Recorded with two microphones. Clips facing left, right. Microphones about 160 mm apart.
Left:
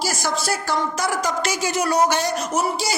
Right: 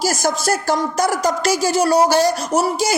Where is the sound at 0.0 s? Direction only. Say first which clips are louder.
Right 5 dB; 45° right (ahead or behind).